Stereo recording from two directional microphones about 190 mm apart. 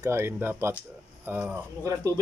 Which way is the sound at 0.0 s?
15° right (ahead or behind).